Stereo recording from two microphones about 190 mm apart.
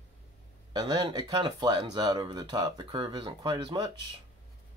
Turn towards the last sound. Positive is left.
turn(degrees=-25)  # may be behind; listen again after turning